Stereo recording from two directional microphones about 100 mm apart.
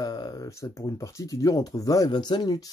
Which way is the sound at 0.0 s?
40° left (ahead or behind).